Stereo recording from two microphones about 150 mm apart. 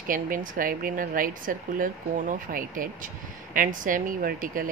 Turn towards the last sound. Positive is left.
turn(degrees=-70)  # may be behind; listen again after turning